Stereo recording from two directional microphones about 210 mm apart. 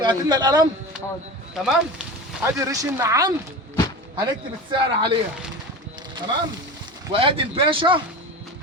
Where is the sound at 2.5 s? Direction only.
15° right (ahead or behind).